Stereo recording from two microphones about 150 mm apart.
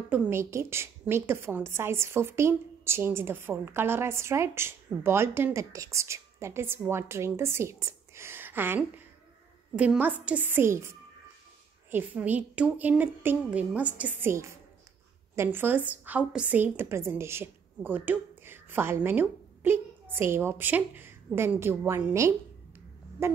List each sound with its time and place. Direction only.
0.1 s a woman's voice: 15° right (ahead or behind)